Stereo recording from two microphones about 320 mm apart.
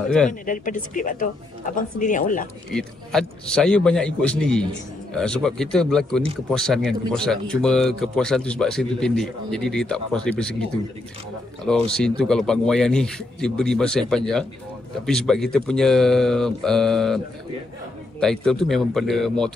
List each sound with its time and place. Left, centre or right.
0.3 s speech: left
2.7 s a man's voice: centre
18.2 s a man's voice: centre